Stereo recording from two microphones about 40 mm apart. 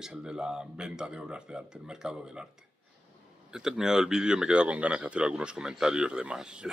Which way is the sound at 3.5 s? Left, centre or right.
Centre.